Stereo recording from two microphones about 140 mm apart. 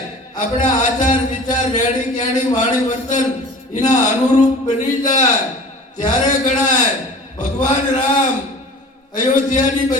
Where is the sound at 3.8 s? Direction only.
60° left (ahead or behind).